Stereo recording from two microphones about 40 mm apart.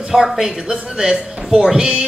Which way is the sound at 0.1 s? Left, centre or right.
Centre.